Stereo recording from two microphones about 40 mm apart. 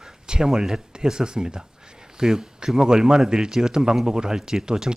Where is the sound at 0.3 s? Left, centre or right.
Centre.